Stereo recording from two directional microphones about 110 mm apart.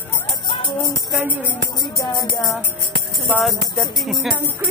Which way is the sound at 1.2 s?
15° right (ahead or behind).